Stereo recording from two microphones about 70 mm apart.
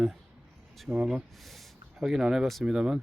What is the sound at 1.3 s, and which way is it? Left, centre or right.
Speech, centre.